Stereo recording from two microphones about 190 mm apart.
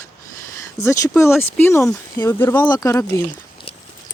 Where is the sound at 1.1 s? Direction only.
10° left (ahead or behind).